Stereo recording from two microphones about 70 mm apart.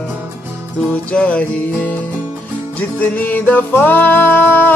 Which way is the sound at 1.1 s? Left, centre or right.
Centre.